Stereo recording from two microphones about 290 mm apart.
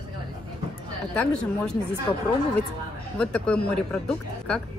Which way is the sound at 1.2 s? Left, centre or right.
Centre.